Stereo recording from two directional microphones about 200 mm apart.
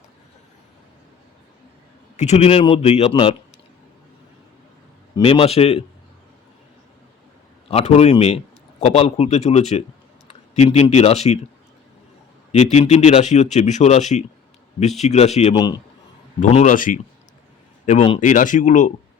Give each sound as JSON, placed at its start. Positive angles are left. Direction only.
{"t": 2.1, "sound": "a man's voice", "side_deg": 35}
{"t": 5.1, "sound": "a man's voice", "side_deg": 25}
{"t": 7.7, "sound": "speech", "side_deg": 30}
{"t": 12.7, "sound": "speech", "side_deg": 35}
{"t": 16.4, "sound": "speech", "side_deg": 35}